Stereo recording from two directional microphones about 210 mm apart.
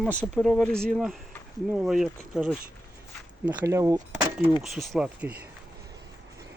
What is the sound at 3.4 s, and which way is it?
Speech, 15° right (ahead or behind).